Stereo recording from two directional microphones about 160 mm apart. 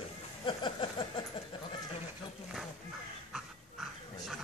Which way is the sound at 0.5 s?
30° left (ahead or behind).